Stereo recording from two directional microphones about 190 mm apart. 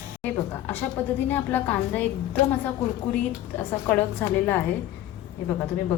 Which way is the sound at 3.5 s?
10° left (ahead or behind).